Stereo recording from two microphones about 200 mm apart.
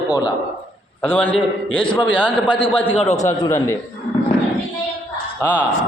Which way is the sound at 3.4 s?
15° left (ahead or behind).